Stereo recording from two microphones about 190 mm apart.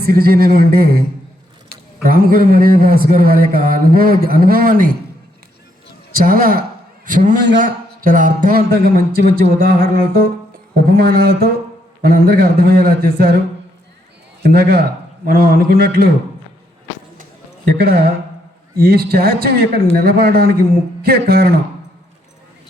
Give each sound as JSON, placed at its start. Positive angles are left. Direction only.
{"t": 0.0, "sound": "a man's voice", "side_deg": -55}
{"t": 6.1, "sound": "a man's voice", "side_deg": -50}
{"t": 14.4, "sound": "a man's voice", "side_deg": -55}
{"t": 17.7, "sound": "a man's voice", "side_deg": -50}